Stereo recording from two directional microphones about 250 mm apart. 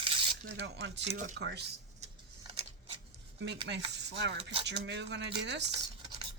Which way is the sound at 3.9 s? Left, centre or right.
Right.